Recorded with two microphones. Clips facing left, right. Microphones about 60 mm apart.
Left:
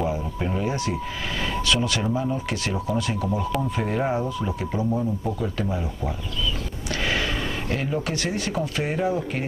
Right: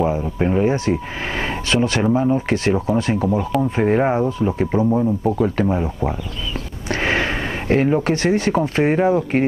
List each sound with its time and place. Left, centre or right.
0.0 s speech: right